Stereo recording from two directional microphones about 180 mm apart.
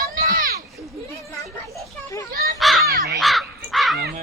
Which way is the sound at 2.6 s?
Centre (ahead or behind).